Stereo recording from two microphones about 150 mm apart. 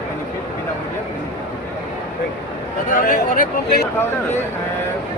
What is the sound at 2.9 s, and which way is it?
Speech, 70° left (ahead or behind).